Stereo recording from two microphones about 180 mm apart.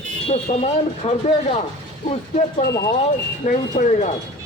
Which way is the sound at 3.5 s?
40° left (ahead or behind).